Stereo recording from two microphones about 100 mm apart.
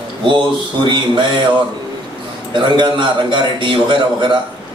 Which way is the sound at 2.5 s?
50° right (ahead or behind).